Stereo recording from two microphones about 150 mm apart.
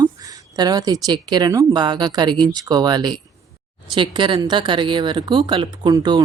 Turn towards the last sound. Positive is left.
turn(degrees=-30)  # may be behind; listen again after turning